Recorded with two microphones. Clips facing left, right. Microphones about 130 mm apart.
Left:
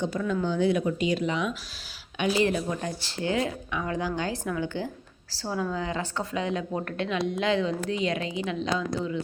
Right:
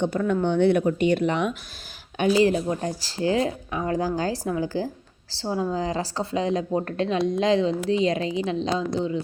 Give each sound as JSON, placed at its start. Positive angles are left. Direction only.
{"t": 0.0, "sound": "speech", "side_deg": -60}
{"t": 2.3, "sound": "speech", "side_deg": -35}